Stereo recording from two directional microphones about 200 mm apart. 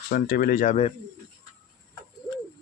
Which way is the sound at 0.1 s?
45° left (ahead or behind).